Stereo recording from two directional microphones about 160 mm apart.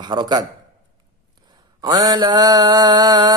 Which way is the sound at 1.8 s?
25° right (ahead or behind).